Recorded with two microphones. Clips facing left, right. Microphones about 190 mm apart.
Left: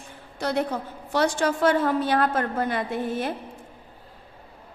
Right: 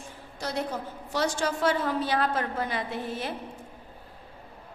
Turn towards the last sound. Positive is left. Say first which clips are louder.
# left 5 dB
turn(degrees=50)  # may be behind; listen again after turning